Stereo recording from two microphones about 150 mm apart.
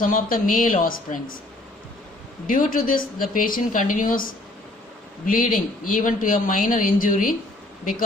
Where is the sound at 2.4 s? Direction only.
65° left (ahead or behind).